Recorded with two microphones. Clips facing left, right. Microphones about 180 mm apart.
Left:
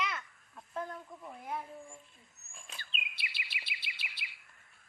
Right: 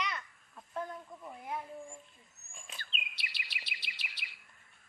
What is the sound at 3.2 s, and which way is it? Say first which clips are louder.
Bird vocalization: left 1 dB; 40° right (ahead or behind).